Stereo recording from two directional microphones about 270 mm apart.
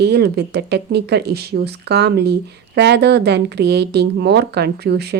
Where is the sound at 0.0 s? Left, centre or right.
Right.